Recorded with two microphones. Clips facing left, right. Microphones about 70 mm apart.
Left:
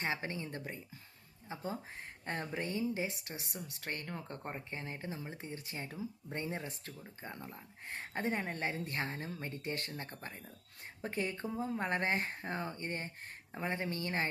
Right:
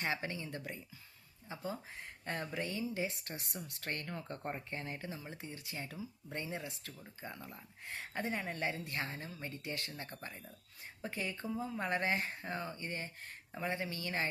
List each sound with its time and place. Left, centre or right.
0.0 s speech: left
3.2 s speech: centre
4.7 s speech: left
9.9 s speech: left
11.0 s speech: left